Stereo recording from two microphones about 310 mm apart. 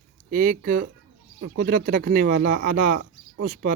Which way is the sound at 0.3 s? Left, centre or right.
Right.